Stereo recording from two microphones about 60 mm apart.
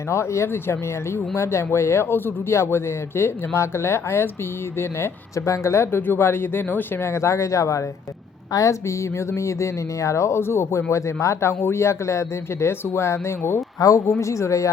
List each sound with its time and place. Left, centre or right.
0.1 s speech: left
7.0 s speech: left
13.7 s speech: left
14.2 s speech: left